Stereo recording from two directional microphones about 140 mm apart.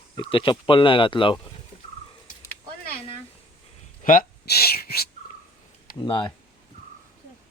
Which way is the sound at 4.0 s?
85° left.